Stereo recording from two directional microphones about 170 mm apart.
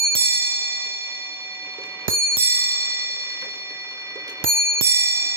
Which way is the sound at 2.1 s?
15° right (ahead or behind).